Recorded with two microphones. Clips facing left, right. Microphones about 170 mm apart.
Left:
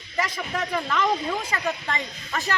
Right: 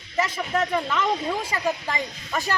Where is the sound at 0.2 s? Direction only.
5° right (ahead or behind).